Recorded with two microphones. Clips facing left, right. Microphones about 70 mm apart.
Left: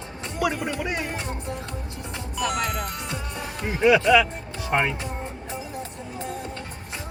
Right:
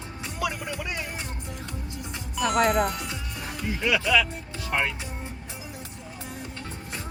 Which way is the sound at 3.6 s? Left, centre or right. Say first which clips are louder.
Left 8 dB; left.